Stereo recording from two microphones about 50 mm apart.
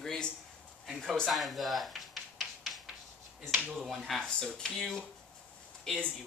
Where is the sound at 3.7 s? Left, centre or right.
Centre.